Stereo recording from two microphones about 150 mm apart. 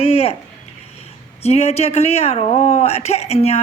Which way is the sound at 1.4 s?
45° left (ahead or behind).